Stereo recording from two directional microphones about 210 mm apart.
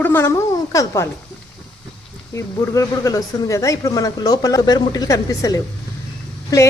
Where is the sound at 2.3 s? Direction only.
15° left (ahead or behind).